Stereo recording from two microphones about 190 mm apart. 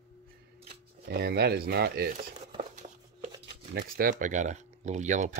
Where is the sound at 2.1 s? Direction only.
40° right (ahead or behind).